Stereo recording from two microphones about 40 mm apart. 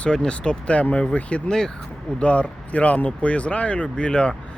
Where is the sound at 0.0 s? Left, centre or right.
Left.